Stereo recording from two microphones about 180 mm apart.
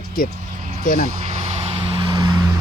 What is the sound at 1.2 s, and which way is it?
Vehicle, 35° right (ahead or behind).